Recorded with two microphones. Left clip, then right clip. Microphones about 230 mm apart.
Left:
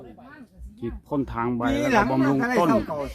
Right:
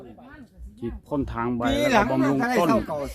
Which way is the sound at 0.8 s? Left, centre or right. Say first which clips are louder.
Even; centre.